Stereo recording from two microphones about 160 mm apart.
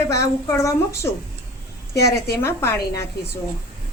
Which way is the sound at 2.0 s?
85° left.